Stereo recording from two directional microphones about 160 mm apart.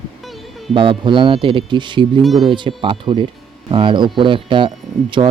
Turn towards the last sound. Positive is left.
turn(degrees=-30)  # may be behind; listen again after turning